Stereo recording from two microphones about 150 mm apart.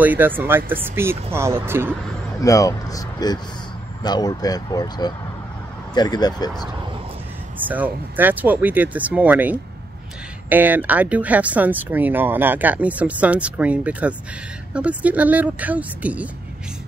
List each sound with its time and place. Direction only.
0.0 s speech: 10° right (ahead or behind)
2.4 s speech: 20° left (ahead or behind)
7.6 s speech: 10° right (ahead or behind)